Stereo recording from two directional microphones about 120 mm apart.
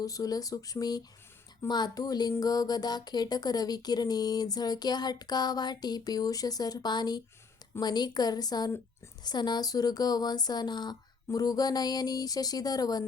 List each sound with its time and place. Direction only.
0.0 s speech: 30° left (ahead or behind)